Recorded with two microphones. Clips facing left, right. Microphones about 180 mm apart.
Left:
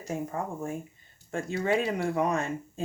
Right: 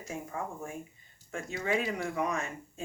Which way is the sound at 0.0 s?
35° left (ahead or behind).